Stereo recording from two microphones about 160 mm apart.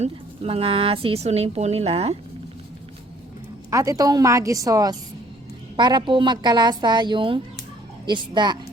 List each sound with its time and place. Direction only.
0.0 s a woman's voice: 40° right (ahead or behind)
3.7 s a woman's voice: 20° right (ahead or behind)